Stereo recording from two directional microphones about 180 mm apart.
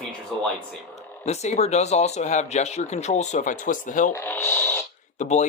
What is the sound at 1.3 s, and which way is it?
Speech, 35° left (ahead or behind).